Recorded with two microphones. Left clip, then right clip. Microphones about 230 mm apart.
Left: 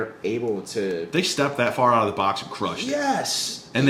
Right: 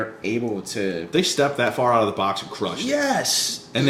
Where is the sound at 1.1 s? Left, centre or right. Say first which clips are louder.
Right 4 dB; left.